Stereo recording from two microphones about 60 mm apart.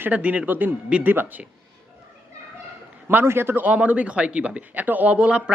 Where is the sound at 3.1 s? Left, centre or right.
Right.